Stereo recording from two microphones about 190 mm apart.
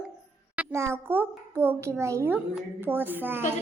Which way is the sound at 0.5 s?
10° right (ahead or behind).